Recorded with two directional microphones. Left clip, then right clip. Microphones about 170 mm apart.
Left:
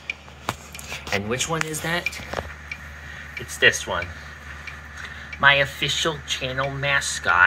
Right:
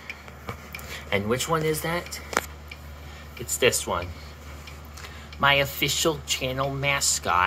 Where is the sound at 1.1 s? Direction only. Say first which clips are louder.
Even; 20° right (ahead or behind).